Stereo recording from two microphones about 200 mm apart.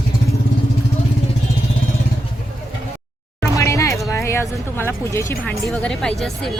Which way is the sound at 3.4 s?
15° left (ahead or behind).